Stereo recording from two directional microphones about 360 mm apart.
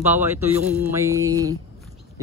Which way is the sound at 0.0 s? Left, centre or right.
Centre.